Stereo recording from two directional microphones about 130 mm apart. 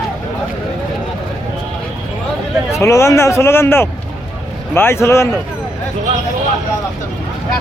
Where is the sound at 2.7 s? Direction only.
20° left (ahead or behind).